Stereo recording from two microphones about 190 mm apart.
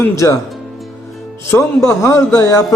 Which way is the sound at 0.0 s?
15° left (ahead or behind).